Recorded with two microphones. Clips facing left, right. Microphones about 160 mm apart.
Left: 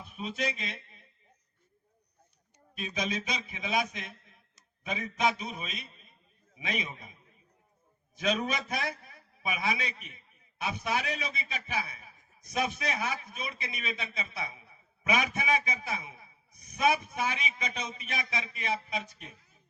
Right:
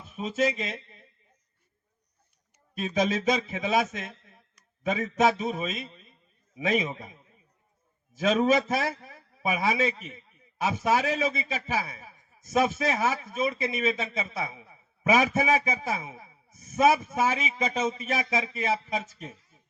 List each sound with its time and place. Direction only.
0.0 s speech: 40° right (ahead or behind)
2.7 s a man's voice: 45° right (ahead or behind)
8.4 s a man's voice: 45° right (ahead or behind)